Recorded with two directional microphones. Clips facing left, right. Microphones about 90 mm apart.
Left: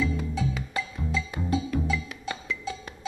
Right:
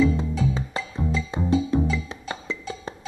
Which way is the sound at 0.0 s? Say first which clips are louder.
Right 6 dB; 30° right (ahead or behind).